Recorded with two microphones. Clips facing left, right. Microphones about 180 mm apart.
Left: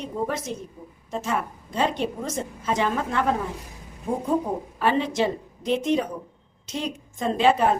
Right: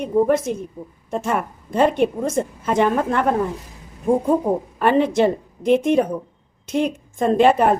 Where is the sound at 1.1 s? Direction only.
55° right (ahead or behind).